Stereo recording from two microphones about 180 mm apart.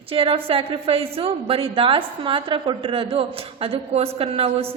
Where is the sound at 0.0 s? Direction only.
30° right (ahead or behind).